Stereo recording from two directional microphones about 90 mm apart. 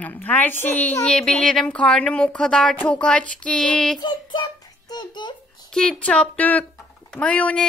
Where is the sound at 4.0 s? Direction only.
60° left (ahead or behind).